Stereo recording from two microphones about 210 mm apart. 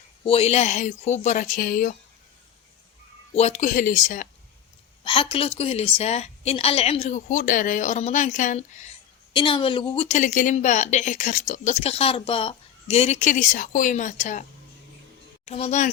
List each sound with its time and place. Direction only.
0.3 s a woman's voice: 30° left (ahead or behind)
3.3 s a woman's voice: 35° left (ahead or behind)
5.0 s a woman's voice: 25° left (ahead or behind)
9.3 s a woman's voice: 25° left (ahead or behind)
15.4 s a woman's voice: 30° left (ahead or behind)